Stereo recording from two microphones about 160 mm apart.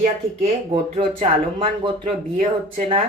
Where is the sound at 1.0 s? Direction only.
35° right (ahead or behind).